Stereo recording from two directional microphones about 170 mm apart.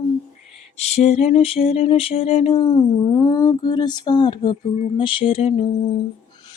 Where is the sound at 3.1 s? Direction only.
20° left (ahead or behind); by 5.6 s 35° left (ahead or behind).